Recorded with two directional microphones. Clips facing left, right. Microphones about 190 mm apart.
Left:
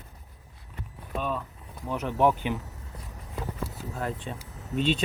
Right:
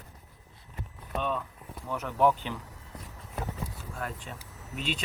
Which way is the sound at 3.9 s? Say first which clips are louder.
Left 6 dB; 25° left (ahead or behind).